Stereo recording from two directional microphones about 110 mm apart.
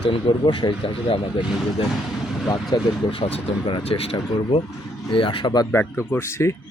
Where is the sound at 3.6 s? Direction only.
60° left (ahead or behind).